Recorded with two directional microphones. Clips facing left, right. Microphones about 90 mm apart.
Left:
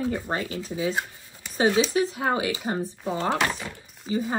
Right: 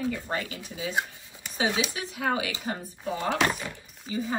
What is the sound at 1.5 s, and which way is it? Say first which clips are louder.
Speech: left 7 dB; 40° left (ahead or behind).